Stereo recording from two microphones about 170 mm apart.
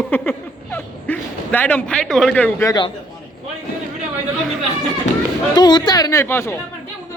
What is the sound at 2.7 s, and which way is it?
Speech, 25° left (ahead or behind).